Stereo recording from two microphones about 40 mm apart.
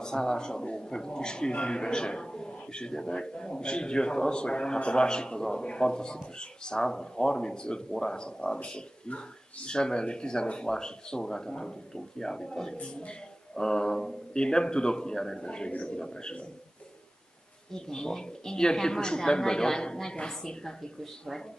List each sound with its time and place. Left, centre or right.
0.0 s a woman's voice: centre
17.7 s a woman's voice: centre